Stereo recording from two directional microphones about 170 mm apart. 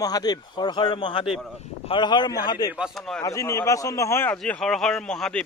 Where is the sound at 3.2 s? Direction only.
20° left (ahead or behind).